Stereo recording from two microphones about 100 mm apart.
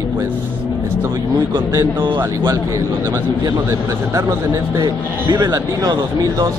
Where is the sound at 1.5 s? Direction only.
25° right (ahead or behind).